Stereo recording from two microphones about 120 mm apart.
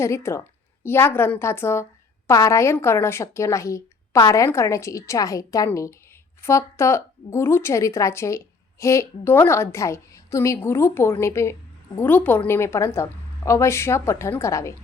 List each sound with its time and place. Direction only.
0.0 s a woman's voice: 20° left (ahead or behind)